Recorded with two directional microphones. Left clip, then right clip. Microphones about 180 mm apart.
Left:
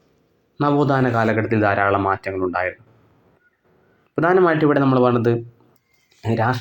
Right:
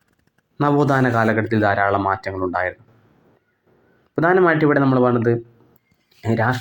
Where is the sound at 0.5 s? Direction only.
15° right (ahead or behind).